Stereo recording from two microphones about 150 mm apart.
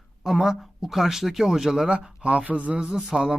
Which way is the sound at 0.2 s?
Centre (ahead or behind).